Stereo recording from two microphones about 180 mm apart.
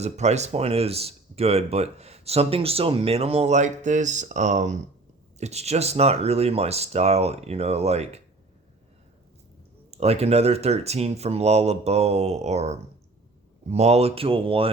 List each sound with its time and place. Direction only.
0.0 s speech: 40° right (ahead or behind)
9.9 s speech: 35° right (ahead or behind)